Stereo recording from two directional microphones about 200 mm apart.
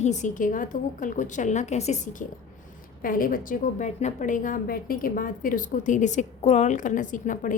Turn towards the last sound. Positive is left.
turn(degrees=40)  # may be behind; listen again after turning